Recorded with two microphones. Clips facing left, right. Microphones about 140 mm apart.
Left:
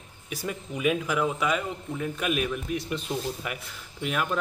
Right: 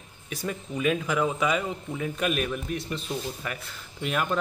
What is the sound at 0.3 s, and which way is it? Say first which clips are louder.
A man's voice: right 1 dB; 10° left (ahead or behind).